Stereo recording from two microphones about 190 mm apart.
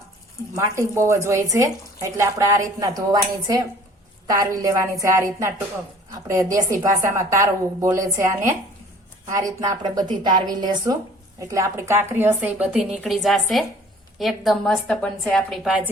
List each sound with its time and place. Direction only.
0.5 s a woman's voice: 15° right (ahead or behind)